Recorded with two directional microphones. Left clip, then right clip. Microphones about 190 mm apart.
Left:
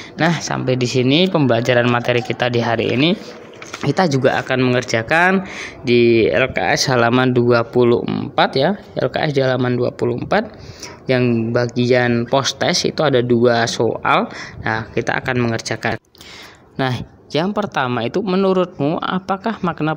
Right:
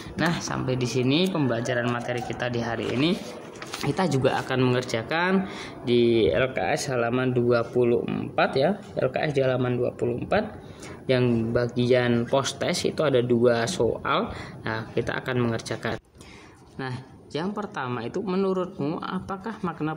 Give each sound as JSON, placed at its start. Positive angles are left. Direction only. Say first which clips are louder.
{"t": 0.2, "sound": "speech", "louder": "left 8 dB", "side_deg": 25}
{"t": 16.7, "sound": "speech", "louder": "left 14 dB", "side_deg": 40}